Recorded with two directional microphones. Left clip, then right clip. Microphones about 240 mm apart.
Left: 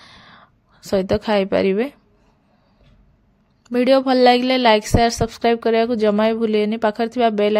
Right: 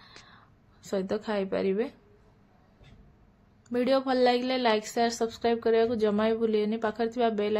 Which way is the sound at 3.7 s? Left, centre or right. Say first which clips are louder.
Left 10 dB; left.